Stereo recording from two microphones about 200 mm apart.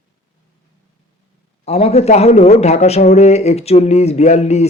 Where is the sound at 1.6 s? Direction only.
30° left (ahead or behind).